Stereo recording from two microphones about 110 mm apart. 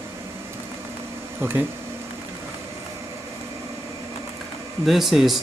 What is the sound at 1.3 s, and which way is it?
Speech, 20° right (ahead or behind).